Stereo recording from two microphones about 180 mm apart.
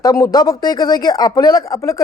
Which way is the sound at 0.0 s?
20° left (ahead or behind).